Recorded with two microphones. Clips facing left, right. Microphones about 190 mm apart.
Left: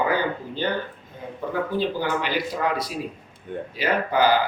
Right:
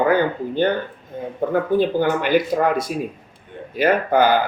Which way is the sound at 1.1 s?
50° right (ahead or behind).